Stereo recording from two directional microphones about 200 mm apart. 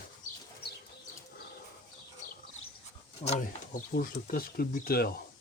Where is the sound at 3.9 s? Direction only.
45° left (ahead or behind).